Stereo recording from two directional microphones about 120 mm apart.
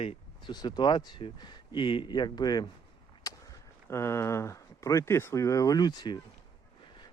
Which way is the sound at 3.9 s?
20° left (ahead or behind).